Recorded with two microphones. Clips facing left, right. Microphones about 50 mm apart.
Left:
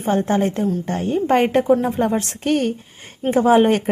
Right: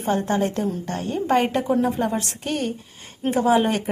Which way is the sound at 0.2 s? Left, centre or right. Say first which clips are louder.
Left 4 dB; left.